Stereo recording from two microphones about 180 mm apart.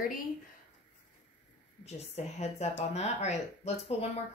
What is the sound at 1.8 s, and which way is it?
Speech, 35° left (ahead or behind).